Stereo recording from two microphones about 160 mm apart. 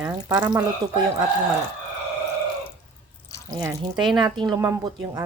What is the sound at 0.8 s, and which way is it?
Speech, 25° right (ahead or behind).